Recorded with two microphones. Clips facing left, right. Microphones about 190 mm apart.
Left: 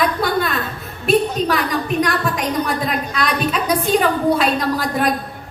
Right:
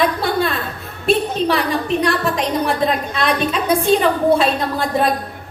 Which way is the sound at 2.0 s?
30° right (ahead or behind).